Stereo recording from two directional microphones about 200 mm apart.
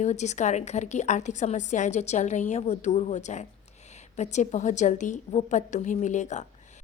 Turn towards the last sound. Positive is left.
turn(degrees=35)  # may be behind; listen again after turning